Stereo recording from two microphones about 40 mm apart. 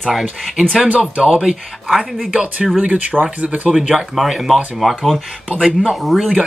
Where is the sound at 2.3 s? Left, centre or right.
Right.